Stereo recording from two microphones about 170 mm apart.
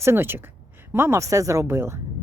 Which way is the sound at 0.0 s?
15° right (ahead or behind).